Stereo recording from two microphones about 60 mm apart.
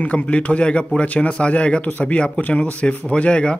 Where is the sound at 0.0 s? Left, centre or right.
Left.